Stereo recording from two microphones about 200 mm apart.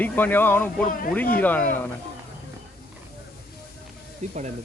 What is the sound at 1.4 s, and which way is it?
Speech, 10° left (ahead or behind).